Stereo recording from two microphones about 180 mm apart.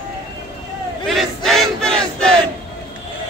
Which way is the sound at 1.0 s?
Centre (ahead or behind).